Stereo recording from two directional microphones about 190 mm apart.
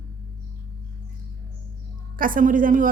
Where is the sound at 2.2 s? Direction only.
45° right (ahead or behind).